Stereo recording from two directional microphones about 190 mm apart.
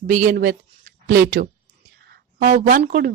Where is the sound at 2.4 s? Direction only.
50° right (ahead or behind).